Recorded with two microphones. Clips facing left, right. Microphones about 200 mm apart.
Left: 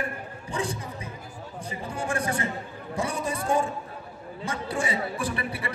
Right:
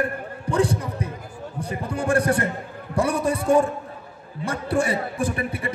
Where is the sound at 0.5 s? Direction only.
65° right (ahead or behind).